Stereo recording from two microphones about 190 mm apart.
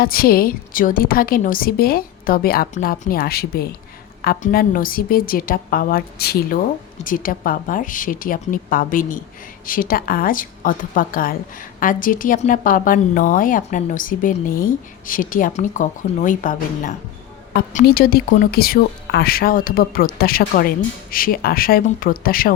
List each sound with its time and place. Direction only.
0.0 s speech: 50° left (ahead or behind)